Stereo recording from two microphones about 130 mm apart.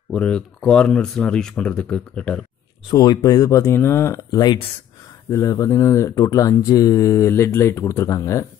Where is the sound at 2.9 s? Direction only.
30° left (ahead or behind).